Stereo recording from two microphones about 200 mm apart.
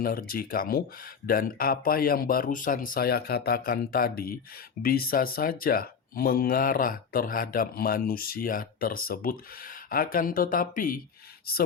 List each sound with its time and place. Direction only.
0.0 s speech: 45° left (ahead or behind)